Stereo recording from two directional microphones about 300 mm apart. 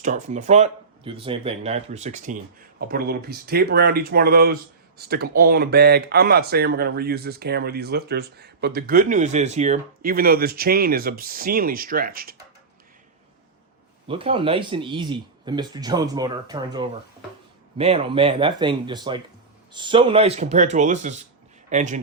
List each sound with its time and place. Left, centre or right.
0.0 s speech: right
14.1 s speech: centre